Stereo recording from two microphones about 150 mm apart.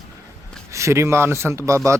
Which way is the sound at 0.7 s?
20° right (ahead or behind).